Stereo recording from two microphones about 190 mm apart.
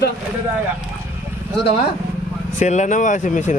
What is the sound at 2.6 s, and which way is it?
Speech, 40° left (ahead or behind).